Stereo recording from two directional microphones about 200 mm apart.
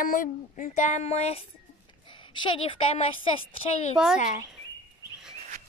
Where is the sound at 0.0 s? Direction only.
45° left (ahead or behind).